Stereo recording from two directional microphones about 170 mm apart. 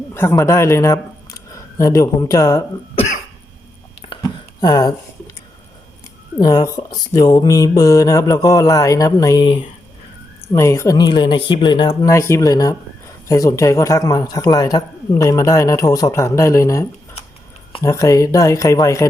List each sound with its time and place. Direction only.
0.1 s speech: 15° left (ahead or behind)
2.9 s cough: 35° left (ahead or behind)
4.0 s a sound: 30° left (ahead or behind)
6.4 s a man's voice: 20° left (ahead or behind)
10.5 s a man's voice: 15° left (ahead or behind)
17.8 s a man's voice: 20° left (ahead or behind)